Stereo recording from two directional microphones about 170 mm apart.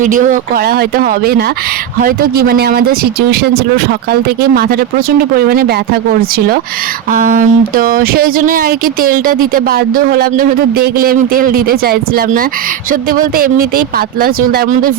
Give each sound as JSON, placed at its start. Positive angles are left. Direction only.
{"t": 0.0, "sound": "speech", "side_deg": -50}